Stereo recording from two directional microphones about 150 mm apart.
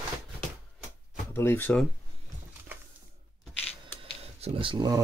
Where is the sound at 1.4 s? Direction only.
15° left (ahead or behind).